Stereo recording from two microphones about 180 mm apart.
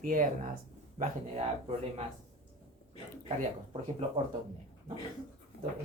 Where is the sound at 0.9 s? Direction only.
35° right (ahead or behind).